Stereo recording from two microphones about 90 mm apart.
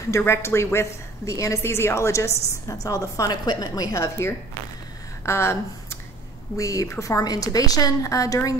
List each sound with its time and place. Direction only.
0.2 s a woman's voice: 30° left (ahead or behind)
5.2 s a sound: 30° left (ahead or behind)
6.5 s a woman's voice: 35° left (ahead or behind)